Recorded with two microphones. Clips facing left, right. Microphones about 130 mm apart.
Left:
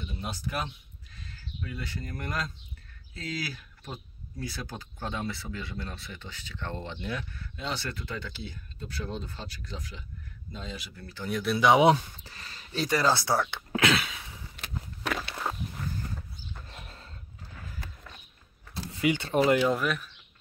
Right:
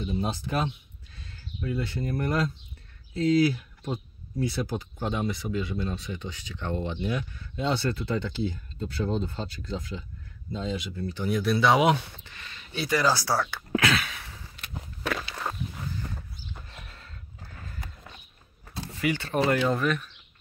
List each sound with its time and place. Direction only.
0.0 s speech: 30° right (ahead or behind)
7.5 s speech: 30° right (ahead or behind)
11.2 s speech: 5° right (ahead or behind)
11.5 s speech: 15° left (ahead or behind)
11.8 s speech: 35° left (ahead or behind)
13.1 s speech: 20° left (ahead or behind)
13.7 s a sound: 20° left (ahead or behind)
16.7 s horse: 30° left (ahead or behind)
18.9 s speech: 20° left (ahead or behind)
19.7 s speech: 5° left (ahead or behind)